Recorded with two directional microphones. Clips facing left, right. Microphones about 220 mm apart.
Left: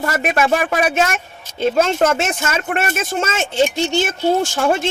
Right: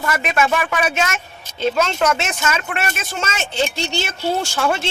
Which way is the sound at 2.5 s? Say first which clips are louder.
Left 3 dB; 35° left (ahead or behind).